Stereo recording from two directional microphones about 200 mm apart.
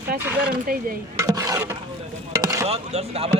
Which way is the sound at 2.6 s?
30° right (ahead or behind).